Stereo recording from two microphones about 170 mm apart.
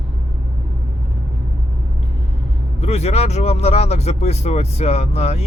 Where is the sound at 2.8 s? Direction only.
40° left (ahead or behind).